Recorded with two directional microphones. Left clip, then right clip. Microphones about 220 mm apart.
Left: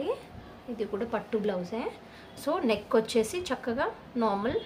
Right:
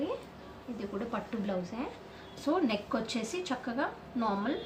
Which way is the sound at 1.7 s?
50° left (ahead or behind).